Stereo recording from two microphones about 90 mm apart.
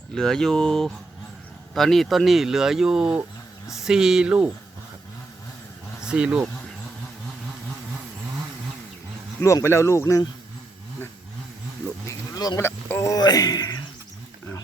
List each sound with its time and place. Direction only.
0.1 s speech: 5° left (ahead or behind); by 4.5 s 15° right (ahead or behind)
6.1 s speech: 10° right (ahead or behind)
9.4 s speech: 35° left (ahead or behind)
12.0 s a sound: 45° left (ahead or behind)
12.5 s speech: 30° left (ahead or behind)
13.1 s speech: 45° left (ahead or behind)